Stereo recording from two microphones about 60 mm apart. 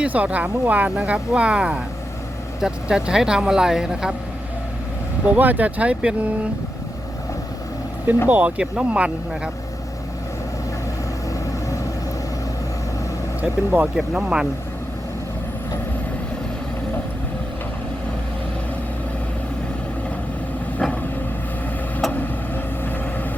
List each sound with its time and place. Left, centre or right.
0.0 s speech: right; by 4.1 s centre
5.2 s speech: right
8.3 s speech: right
13.4 s speech: right
13.8 s speech: centre